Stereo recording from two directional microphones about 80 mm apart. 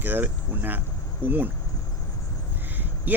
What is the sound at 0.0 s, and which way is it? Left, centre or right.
Speech, right.